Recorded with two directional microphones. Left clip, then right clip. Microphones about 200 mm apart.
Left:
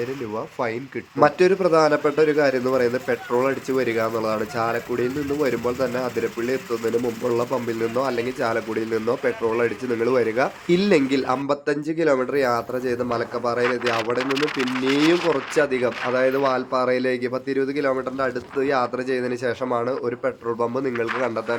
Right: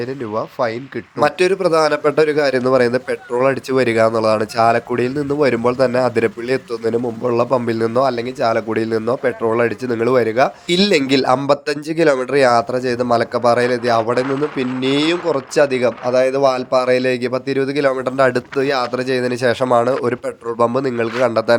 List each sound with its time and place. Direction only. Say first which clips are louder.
1.2 s a man's voice: right 2 dB; 25° right (ahead or behind)
18.5 s a man's voice: right 4 dB; 25° right (ahead or behind)